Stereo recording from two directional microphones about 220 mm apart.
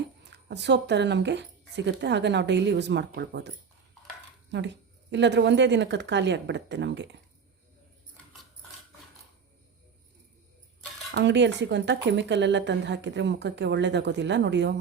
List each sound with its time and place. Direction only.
0.3 s speech: 50° right (ahead or behind)
4.5 s speech: 55° right (ahead or behind)
11.1 s speech: 55° right (ahead or behind)